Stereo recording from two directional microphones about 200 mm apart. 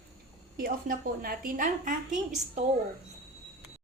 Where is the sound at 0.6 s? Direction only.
45° right (ahead or behind).